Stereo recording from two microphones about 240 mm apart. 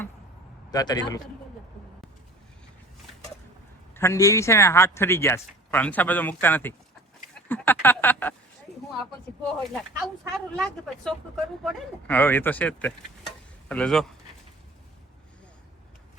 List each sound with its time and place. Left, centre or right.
0.7 s speech: centre
3.9 s speech: centre
7.4 s a sound: centre
9.6 s speech: centre